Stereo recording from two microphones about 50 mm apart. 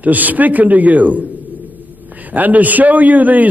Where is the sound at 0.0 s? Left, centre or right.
Right.